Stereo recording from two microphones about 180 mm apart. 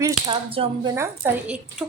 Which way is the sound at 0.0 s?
30° right (ahead or behind).